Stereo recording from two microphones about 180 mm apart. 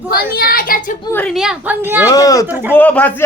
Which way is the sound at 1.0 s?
10° left (ahead or behind).